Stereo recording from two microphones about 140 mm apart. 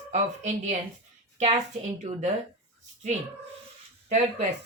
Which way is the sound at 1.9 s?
60° right (ahead or behind).